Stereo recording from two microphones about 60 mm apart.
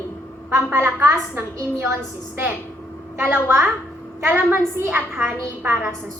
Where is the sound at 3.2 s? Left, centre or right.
Right.